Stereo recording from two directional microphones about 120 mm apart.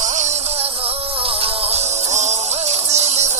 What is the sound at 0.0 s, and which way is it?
Music, 80° right.